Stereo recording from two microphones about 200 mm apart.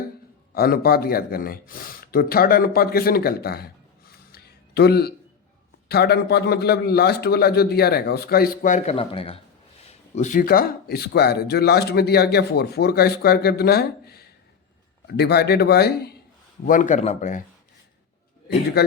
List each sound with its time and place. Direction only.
0.5 s speech: 50° left (ahead or behind)
4.3 s music: 55° left (ahead or behind)
5.9 s speech: 55° left (ahead or behind)
9.0 s speech: 30° left (ahead or behind)
10.2 s speech: 40° left (ahead or behind)
16.6 s speech: 40° left (ahead or behind)